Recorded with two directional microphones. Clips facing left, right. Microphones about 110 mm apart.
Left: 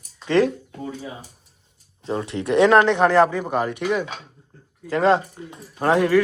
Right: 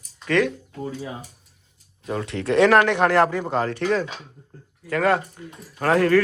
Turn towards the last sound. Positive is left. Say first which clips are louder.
# even
turn(degrees=20)  # may be behind; listen again after turning